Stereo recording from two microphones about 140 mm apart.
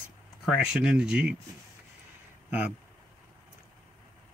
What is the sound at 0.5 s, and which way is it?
Speech, 5° right (ahead or behind).